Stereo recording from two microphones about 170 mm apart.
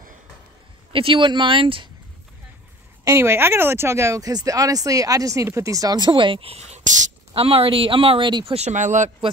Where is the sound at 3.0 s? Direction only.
15° right (ahead or behind); by 7.1 s 45° right (ahead or behind).